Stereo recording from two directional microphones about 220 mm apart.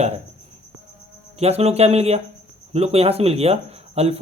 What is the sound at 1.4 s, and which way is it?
A woman's voice, 30° right (ahead or behind).